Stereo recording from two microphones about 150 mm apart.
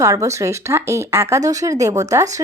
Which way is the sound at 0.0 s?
20° right (ahead or behind).